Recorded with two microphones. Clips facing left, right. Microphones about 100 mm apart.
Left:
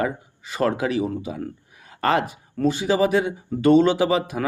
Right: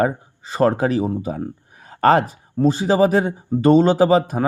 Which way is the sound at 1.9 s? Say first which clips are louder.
Right 6 dB; 40° right (ahead or behind).